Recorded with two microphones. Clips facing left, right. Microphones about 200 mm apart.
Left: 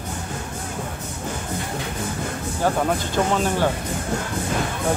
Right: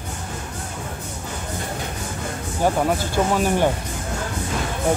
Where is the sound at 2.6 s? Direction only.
10° right (ahead or behind).